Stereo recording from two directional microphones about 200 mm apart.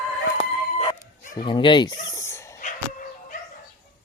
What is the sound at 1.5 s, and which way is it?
Dog, 25° left (ahead or behind).